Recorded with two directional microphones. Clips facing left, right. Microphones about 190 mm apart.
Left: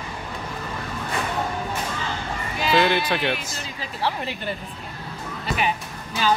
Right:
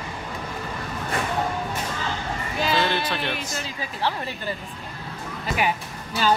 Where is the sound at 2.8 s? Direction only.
15° left (ahead or behind).